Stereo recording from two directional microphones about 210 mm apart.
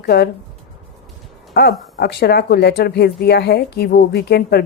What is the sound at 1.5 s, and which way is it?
Speech, 50° left (ahead or behind).